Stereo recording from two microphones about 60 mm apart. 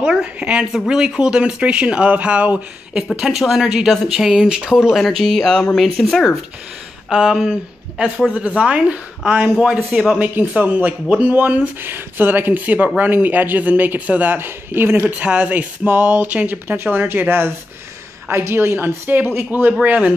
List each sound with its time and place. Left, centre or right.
0.0 s speech: centre
3.2 s speech: centre
4.9 s speech: centre
7.1 s speech: centre
8.5 s speech: right
9.6 s speech: centre
10.1 s speech: right
15.0 s speech: right
16.6 s speech: right
19.8 s speech: right